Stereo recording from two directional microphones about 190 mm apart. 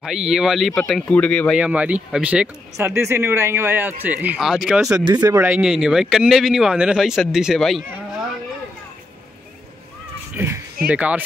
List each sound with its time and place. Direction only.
0.0 s speech: centre (ahead or behind)
1.6 s speech: 5° right (ahead or behind)
5.0 s speech: 20° right (ahead or behind)
5.5 s speech: 5° right (ahead or behind)
10.3 s a sound: 15° right (ahead or behind)
10.9 s speech: 10° right (ahead or behind)